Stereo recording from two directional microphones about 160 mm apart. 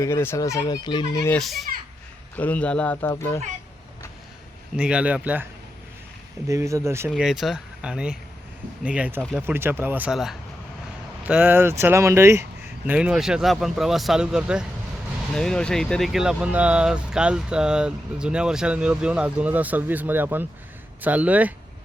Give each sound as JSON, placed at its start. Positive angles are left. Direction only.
{"t": 0.0, "sound": "speech", "side_deg": 15}
{"t": 1.4, "sound": "speech", "side_deg": 0}
{"t": 4.8, "sound": "speech", "side_deg": -5}
{"t": 6.5, "sound": "speech", "side_deg": -20}
{"t": 7.1, "sound": "speech", "side_deg": 0}